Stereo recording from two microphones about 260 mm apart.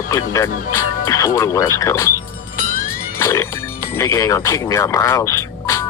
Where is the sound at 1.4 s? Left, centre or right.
Centre.